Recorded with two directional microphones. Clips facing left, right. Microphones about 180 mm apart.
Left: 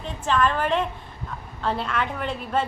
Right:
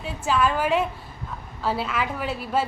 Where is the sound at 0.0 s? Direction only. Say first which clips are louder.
Even; 5° right (ahead or behind).